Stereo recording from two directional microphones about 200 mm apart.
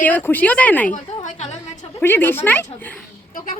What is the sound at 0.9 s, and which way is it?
Speech, 35° left (ahead or behind).